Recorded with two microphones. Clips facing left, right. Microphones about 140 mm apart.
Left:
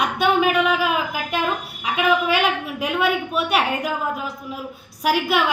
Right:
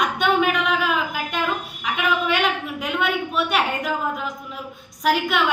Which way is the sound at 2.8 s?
10° left (ahead or behind).